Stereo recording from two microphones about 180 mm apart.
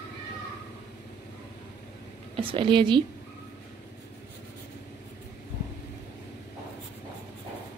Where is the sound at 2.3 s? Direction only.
30° right (ahead or behind).